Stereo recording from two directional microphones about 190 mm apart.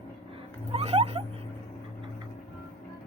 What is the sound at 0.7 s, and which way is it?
Rodents, 35° right (ahead or behind).